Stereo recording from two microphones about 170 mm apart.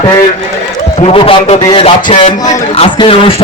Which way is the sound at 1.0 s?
35° left (ahead or behind).